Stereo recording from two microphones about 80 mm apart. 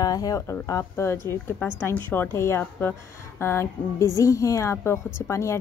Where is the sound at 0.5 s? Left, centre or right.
Left.